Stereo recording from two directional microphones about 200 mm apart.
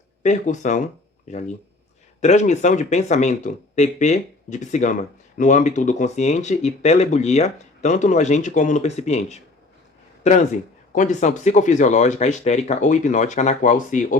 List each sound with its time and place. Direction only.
0.2 s speech: 40° left (ahead or behind)
10.9 s speech: 35° left (ahead or behind)